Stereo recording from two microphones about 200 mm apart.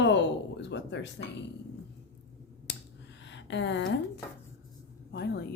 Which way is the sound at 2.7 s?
55° left (ahead or behind).